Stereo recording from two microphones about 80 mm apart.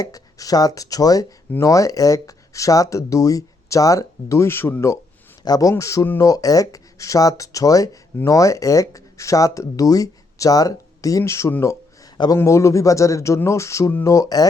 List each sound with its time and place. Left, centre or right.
0.0 s speech: left
5.5 s speech: left
11.3 s speech: left
12.1 s a man's voice: left
12.4 s speech: left